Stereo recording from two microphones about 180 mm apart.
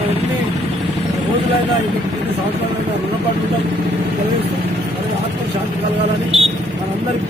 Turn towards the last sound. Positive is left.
turn(degrees=-35)  # may be behind; listen again after turning